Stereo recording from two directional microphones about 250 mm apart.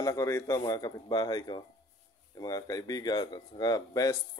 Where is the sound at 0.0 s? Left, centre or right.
Centre.